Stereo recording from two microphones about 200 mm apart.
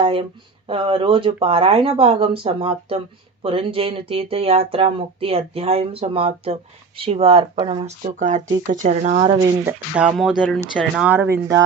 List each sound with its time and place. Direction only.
0.0 s speech: 25° right (ahead or behind)
9.6 s speech: 5° right (ahead or behind)